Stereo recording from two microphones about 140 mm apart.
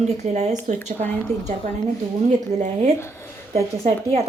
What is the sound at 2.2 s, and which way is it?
A woman's voice, 55° right (ahead or behind).